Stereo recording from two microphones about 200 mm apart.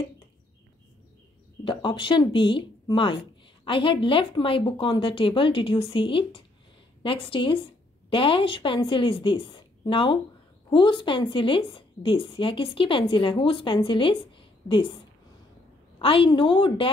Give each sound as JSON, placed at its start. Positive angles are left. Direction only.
{"t": 1.6, "sound": "a woman's voice", "side_deg": 25}
{"t": 16.0, "sound": "a woman's voice", "side_deg": 25}